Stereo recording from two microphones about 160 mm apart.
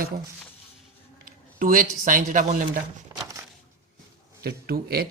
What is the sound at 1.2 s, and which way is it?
A man's voice, 60° right (ahead or behind).